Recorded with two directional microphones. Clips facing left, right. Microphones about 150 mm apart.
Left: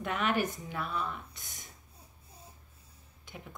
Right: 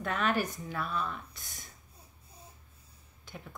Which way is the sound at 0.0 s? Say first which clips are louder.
Even; 15° left (ahead or behind).